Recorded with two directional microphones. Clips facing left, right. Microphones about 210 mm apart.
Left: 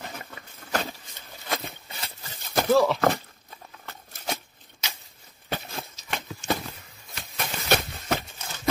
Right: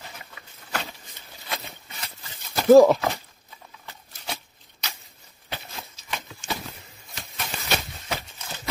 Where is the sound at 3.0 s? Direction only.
50° left (ahead or behind).